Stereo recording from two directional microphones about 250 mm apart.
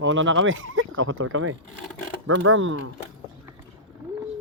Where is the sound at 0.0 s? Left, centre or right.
Right.